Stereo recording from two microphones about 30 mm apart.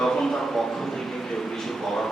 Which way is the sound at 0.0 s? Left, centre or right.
Centre.